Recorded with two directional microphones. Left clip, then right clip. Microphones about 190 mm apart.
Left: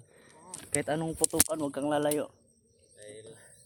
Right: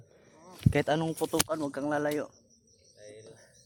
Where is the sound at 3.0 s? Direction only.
40° left (ahead or behind).